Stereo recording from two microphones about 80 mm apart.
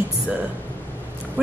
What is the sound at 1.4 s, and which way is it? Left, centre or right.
Clip-clop, centre.